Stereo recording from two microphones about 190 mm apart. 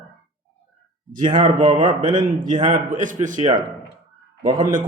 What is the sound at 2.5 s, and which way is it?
Speech, 25° right (ahead or behind).